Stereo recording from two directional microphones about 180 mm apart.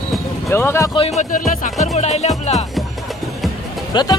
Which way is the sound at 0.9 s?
35° left (ahead or behind).